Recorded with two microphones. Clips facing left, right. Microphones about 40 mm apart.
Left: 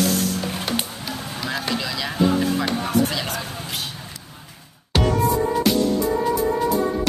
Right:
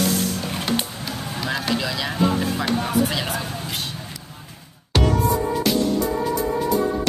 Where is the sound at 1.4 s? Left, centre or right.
Centre.